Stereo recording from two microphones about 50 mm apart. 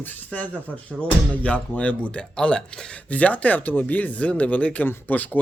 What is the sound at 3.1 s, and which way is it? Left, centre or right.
Speech, left.